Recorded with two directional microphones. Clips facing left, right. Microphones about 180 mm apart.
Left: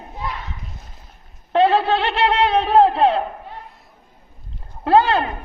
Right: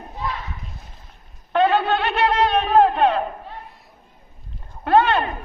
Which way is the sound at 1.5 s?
30° left (ahead or behind).